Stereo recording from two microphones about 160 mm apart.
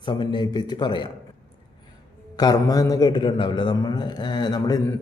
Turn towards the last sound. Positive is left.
turn(degrees=25)  # may be behind; listen again after turning